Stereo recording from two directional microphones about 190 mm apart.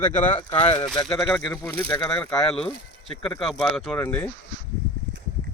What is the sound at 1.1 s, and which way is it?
Speech, 5° left (ahead or behind).